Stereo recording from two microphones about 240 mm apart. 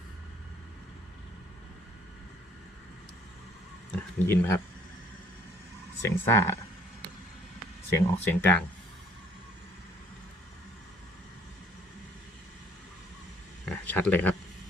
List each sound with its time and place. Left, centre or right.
3.9 s speech: centre
6.0 s speech: centre
7.9 s speech: centre
13.7 s a sound: centre